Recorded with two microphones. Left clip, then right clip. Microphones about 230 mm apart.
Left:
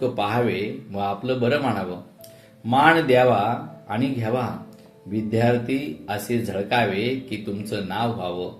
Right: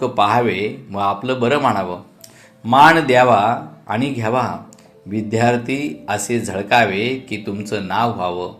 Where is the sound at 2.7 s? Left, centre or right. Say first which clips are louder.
Right 6 dB; centre.